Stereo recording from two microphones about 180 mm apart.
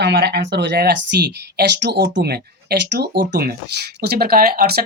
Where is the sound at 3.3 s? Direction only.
55° right (ahead or behind).